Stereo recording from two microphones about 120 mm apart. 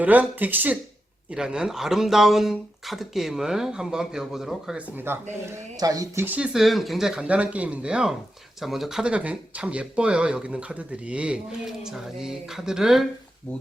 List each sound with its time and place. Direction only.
0.0 s speech: 15° right (ahead or behind)
5.1 s speech: 20° right (ahead or behind)
5.8 s speech: 30° right (ahead or behind)
6.2 s speech: 10° right (ahead or behind)